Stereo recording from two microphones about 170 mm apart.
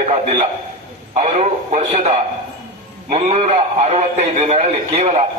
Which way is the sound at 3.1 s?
40° right (ahead or behind).